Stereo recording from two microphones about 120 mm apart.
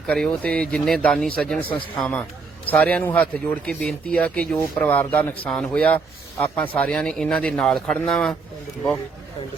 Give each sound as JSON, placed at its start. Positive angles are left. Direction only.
{"t": 0.1, "sound": "speech", "side_deg": 10}